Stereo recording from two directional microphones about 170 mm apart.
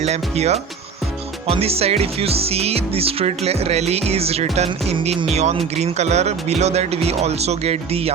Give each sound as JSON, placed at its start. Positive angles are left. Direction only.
{"t": 0.0, "sound": "music", "side_deg": -40}